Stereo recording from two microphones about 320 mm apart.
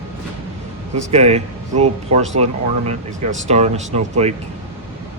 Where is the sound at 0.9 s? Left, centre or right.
Right.